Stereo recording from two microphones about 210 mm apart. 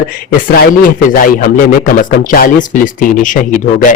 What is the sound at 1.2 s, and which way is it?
Speech, 40° left (ahead or behind).